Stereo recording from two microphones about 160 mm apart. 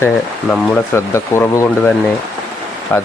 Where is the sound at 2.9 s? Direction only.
15° left (ahead or behind).